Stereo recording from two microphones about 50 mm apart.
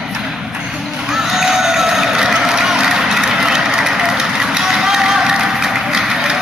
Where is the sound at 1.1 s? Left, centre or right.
Centre.